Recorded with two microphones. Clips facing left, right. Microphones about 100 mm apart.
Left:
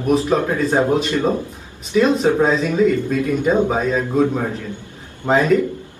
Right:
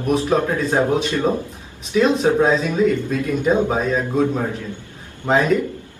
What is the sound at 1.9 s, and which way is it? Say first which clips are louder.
Speech: left 1 dB; centre (ahead or behind).